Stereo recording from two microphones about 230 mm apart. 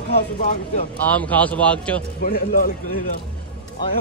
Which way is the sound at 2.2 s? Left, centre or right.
Left.